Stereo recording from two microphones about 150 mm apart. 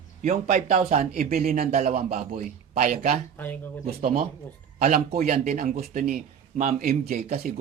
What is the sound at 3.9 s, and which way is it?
Speech, 80° right.